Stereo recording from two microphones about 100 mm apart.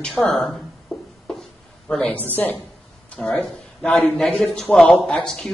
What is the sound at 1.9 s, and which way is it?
Speech, 15° left (ahead or behind).